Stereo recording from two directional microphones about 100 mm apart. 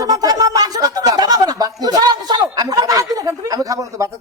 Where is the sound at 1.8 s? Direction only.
40° right (ahead or behind).